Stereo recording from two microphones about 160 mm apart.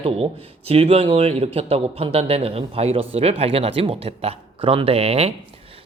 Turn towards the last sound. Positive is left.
turn(degrees=-40)  # may be behind; listen again after turning